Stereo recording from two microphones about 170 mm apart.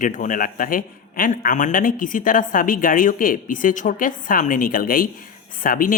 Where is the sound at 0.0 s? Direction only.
50° left (ahead or behind).